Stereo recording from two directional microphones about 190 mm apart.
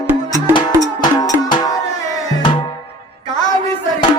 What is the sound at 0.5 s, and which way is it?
Music, 20° left (ahead or behind).